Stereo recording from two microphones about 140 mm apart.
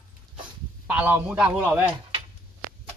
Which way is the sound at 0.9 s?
10° right (ahead or behind).